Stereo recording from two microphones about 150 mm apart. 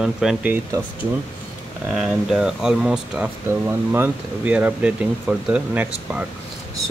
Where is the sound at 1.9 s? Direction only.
5° right (ahead or behind).